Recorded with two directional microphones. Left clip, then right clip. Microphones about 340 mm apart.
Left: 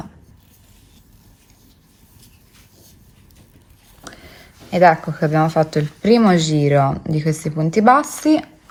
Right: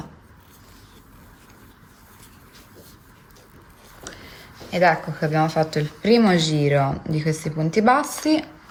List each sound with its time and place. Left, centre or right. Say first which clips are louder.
4.0 s a woman's voice: left 1 dB; centre